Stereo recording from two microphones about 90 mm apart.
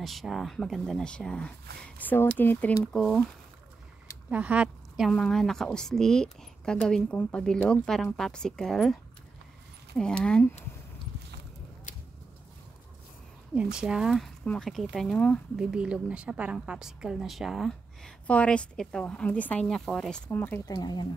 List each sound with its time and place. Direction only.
0.0 s a woman's voice: centre (ahead or behind); by 2.7 s 20° left (ahead or behind)
2.8 s a woman's voice: 5° left (ahead or behind)
4.3 s speech: 15° right (ahead or behind)
5.1 s speech: 5° left (ahead or behind)
9.9 s speech: 10° left (ahead or behind)
13.6 s a woman's voice: 10° right (ahead or behind)
14.2 s a woman's voice: 10° left (ahead or behind)
15.1 s speech: 15° left (ahead or behind)
15.5 s a woman's voice: 10° right (ahead or behind)
18.2 s speech: 15° left (ahead or behind)
20.3 s speech: 20° left (ahead or behind)
20.6 s speech: 45° left (ahead or behind)